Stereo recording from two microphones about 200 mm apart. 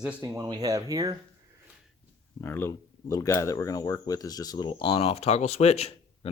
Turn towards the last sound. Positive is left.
turn(degrees=30)  # may be behind; listen again after turning